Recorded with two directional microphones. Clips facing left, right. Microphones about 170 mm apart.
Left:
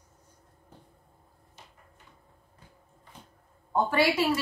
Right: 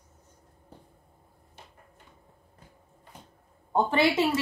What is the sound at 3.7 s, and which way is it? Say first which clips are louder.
Speech: right 1 dB; 25° right (ahead or behind).